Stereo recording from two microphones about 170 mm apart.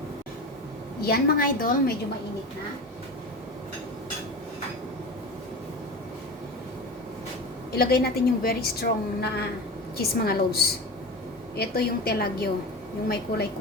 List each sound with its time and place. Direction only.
1.0 s a woman's voice: 65° left (ahead or behind)
7.7 s a woman's voice: 65° left (ahead or behind)